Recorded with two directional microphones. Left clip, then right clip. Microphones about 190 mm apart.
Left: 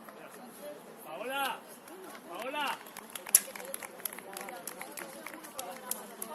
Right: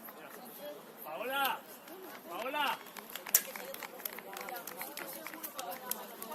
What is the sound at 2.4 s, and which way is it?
Run, 25° right (ahead or behind).